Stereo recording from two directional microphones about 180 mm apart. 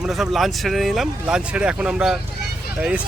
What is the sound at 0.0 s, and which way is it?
Speech, centre (ahead or behind).